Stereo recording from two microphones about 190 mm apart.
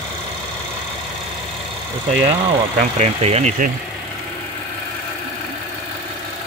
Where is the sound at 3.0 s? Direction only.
35° right (ahead or behind).